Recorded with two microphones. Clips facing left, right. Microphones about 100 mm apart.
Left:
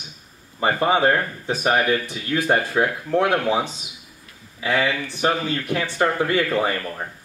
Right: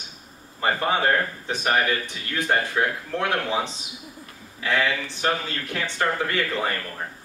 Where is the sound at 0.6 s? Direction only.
20° left (ahead or behind).